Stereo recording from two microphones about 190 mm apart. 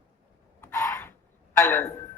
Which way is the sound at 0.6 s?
15° left (ahead or behind).